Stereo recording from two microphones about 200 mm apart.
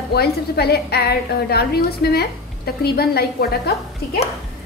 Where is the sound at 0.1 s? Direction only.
50° left (ahead or behind).